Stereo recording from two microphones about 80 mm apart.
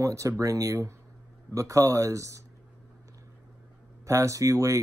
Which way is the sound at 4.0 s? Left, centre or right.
Right.